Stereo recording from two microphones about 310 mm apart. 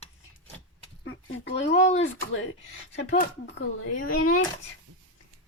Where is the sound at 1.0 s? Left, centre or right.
Left.